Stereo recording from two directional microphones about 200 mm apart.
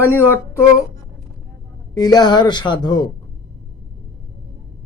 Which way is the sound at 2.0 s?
20° left (ahead or behind).